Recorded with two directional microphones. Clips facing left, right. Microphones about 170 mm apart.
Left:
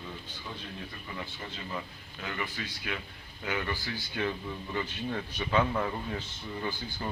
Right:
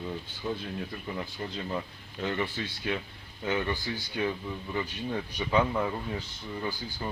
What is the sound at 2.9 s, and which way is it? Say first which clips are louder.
A man's voice: right 5 dB; 30° right (ahead or behind).